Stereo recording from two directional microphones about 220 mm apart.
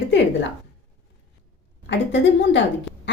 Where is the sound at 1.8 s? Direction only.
55° left (ahead or behind).